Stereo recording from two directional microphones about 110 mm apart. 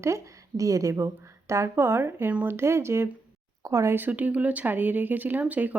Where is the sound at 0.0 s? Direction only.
30° right (ahead or behind).